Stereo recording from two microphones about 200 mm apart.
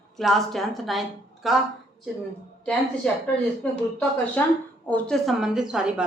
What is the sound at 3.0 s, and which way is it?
A woman's voice, 5° left (ahead or behind).